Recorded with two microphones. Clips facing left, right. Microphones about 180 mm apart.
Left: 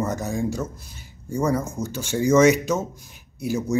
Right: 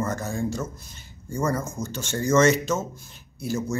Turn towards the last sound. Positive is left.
turn(degrees=15)  # may be behind; listen again after turning